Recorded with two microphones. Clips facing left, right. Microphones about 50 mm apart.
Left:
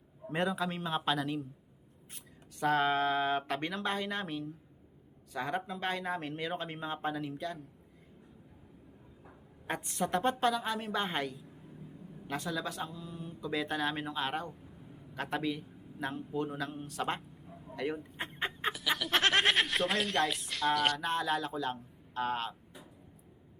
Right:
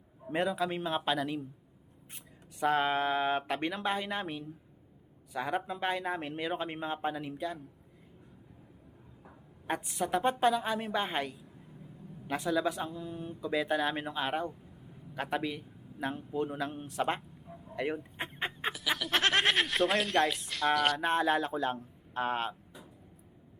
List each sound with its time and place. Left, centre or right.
0.3 s speech: centre
2.6 s speech: centre
9.6 s speech: centre
12.9 s a man's voice: right
13.4 s a man's voice: centre
21.0 s a man's voice: right